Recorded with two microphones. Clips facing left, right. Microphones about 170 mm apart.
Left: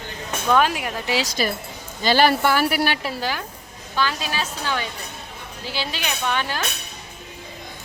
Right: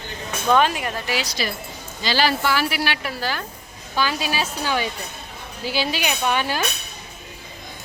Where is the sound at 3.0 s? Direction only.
25° left (ahead or behind).